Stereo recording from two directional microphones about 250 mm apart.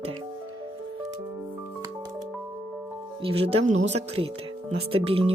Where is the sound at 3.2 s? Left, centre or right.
Right.